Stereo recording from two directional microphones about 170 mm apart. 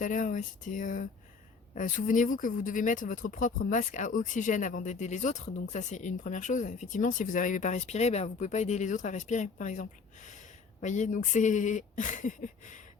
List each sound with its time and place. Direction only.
0.0 s speech: 50° left (ahead or behind)